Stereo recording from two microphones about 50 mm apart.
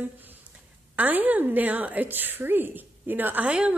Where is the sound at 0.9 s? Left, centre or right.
Right.